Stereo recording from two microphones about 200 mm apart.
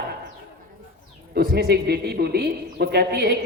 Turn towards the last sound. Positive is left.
turn(degrees=-55)  # may be behind; listen again after turning